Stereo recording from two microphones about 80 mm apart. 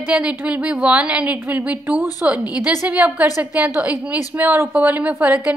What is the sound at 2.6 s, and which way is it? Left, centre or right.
A woman's voice, right.